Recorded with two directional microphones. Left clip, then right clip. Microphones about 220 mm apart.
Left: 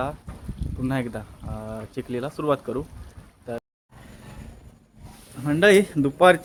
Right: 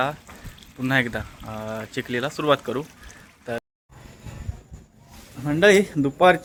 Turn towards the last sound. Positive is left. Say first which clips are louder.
# even
turn(degrees=0)  # may be behind; listen again after turning